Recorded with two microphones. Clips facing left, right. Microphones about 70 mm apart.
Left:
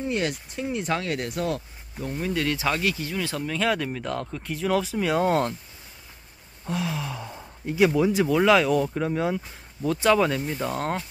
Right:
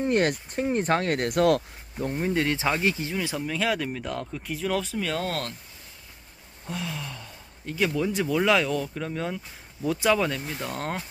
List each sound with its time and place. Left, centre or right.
0.0 s speech: right
2.0 s speech: right; by 5.5 s centre
6.7 s gasp: centre
7.6 s speech: centre
9.8 s speech: centre